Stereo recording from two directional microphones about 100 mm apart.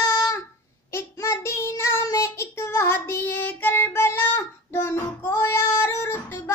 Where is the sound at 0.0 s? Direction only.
35° left (ahead or behind).